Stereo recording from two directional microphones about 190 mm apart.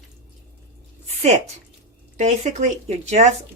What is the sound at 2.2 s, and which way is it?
Speech, 35° right (ahead or behind).